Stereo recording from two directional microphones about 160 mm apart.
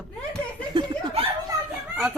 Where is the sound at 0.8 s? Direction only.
25° right (ahead or behind).